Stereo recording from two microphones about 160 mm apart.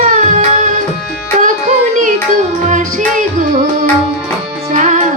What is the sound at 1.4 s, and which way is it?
Music, 55° right (ahead or behind).